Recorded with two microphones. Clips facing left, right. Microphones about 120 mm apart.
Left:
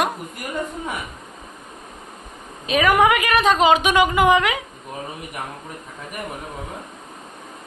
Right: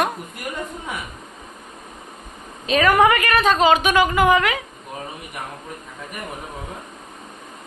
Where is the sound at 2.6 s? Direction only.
10° left (ahead or behind).